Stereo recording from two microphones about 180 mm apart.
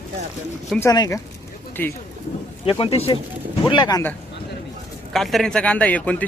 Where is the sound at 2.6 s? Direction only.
30° left (ahead or behind).